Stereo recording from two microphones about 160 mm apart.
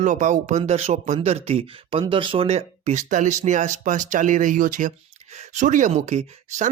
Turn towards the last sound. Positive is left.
turn(degrees=-50)  # may be behind; listen again after turning